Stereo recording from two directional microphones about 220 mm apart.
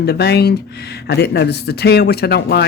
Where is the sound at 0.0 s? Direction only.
50° left (ahead or behind).